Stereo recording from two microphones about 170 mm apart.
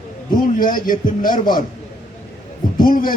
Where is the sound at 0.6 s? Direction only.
55° left (ahead or behind).